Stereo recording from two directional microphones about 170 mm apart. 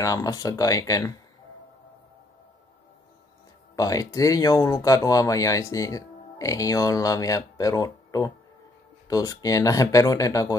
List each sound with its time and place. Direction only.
0.0 s speech: 20° left (ahead or behind)
3.7 s speech: 20° left (ahead or behind)